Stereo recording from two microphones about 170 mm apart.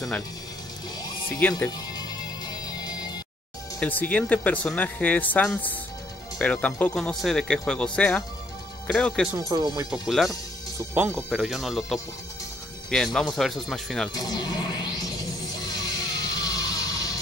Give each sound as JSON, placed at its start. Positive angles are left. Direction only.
{"t": 1.5, "sound": "speech", "side_deg": 25}
{"t": 2.4, "sound": "music", "side_deg": 25}
{"t": 3.8, "sound": "a man's voice", "side_deg": 10}
{"t": 9.5, "sound": "speech", "side_deg": -25}
{"t": 9.8, "sound": "a man's voice", "side_deg": 0}
{"t": 14.1, "sound": "music", "side_deg": 20}